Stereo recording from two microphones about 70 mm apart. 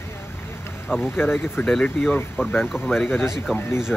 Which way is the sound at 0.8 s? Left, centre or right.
Centre.